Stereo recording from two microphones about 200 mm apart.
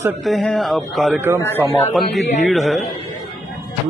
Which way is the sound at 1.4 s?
10° left (ahead or behind).